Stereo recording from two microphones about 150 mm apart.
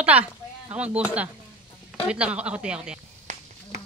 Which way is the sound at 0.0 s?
10° right (ahead or behind).